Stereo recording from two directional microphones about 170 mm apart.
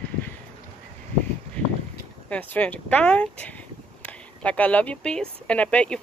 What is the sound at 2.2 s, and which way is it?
Speech, 10° left (ahead or behind).